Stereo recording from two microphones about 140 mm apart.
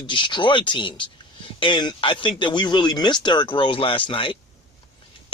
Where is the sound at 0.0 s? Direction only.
35° left (ahead or behind).